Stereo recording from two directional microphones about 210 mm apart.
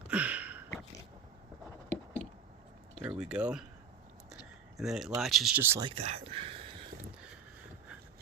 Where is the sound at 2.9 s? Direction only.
5° right (ahead or behind).